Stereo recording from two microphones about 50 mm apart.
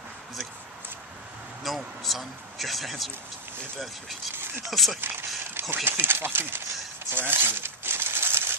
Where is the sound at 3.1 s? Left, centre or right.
Right.